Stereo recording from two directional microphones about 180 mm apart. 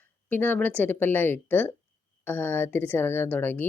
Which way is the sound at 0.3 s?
10° left (ahead or behind).